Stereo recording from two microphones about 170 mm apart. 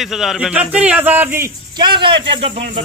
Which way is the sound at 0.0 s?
Centre (ahead or behind).